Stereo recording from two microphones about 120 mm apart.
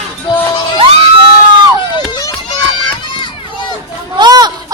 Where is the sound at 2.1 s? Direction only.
30° left (ahead or behind).